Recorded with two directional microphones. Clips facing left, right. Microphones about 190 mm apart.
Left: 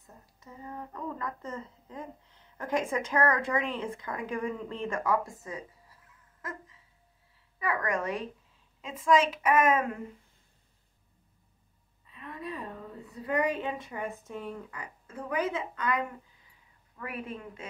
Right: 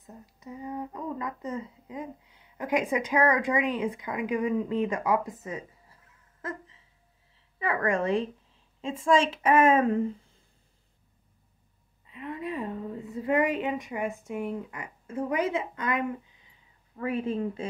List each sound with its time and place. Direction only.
0.0 s speech: 15° right (ahead or behind)
7.5 s a woman's voice: 25° right (ahead or behind)
12.1 s a woman's voice: 20° right (ahead or behind)
15.0 s a woman's voice: 25° right (ahead or behind)